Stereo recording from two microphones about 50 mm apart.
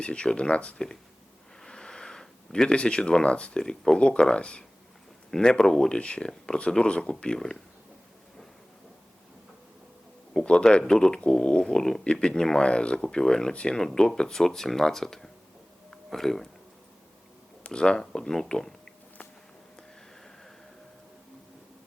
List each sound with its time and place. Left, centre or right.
0.0 s speech: centre
1.6 s speech: centre
10.4 s speech: centre
12.0 s speech: left
15.9 s a sound: centre
17.6 s speech: centre